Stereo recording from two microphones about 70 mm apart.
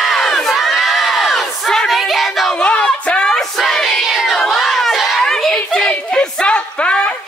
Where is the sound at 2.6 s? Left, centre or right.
Centre.